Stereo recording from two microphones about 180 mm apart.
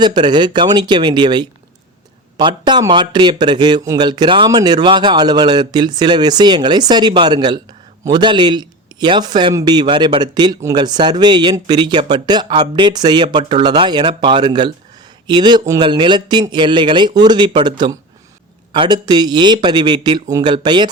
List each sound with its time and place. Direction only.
0.0 s speech: 25° right (ahead or behind)